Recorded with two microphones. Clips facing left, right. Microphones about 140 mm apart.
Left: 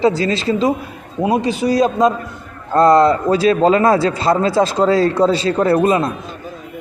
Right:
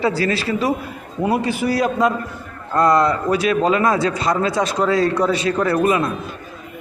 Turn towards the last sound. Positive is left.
turn(degrees=30)  # may be behind; listen again after turning